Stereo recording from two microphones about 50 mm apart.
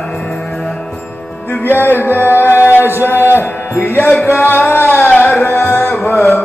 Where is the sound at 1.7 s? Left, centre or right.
Left.